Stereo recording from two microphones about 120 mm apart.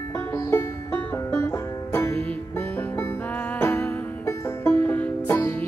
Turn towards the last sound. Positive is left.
turn(degrees=25)  # may be behind; listen again after turning